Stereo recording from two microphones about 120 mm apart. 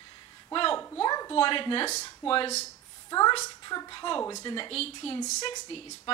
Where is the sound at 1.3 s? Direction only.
45° left (ahead or behind).